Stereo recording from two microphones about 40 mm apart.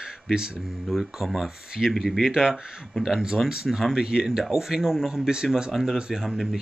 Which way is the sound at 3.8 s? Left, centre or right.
Centre.